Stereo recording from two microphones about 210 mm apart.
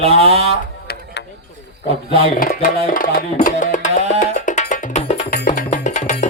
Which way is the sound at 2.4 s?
40° left (ahead or behind).